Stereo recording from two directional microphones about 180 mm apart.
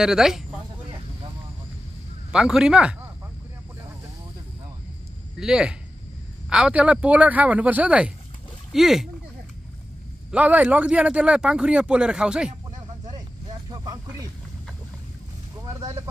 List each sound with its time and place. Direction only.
0.0 s speech: 5° right (ahead or behind)
2.3 s speech: 5° right (ahead or behind)
5.4 s speech: 5° right (ahead or behind)
10.3 s speech: 5° right (ahead or behind)
13.7 s a sound: 20° right (ahead or behind)